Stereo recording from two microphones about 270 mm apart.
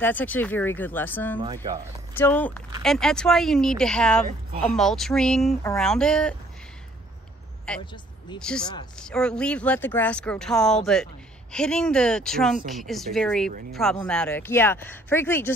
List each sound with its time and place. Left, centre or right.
0.0 s speech: centre
1.4 s speech: centre
2.1 s speech: centre
4.3 s a woman's voice: right
4.7 s speech: centre
7.8 s speech: centre
8.4 s speech: centre